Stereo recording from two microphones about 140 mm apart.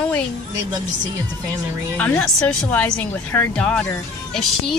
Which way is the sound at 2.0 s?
10° left (ahead or behind).